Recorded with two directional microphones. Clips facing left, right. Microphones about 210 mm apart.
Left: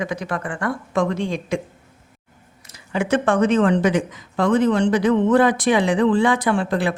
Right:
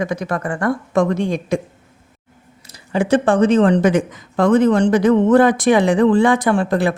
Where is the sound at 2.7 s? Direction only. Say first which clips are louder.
Right 4 dB; 35° right (ahead or behind).